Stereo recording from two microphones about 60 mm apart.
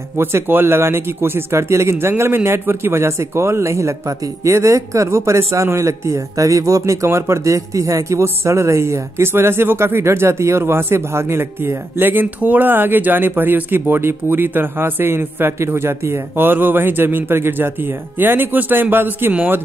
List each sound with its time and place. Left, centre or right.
0.2 s speech: right
7.1 s speech: right
10.6 s speech: right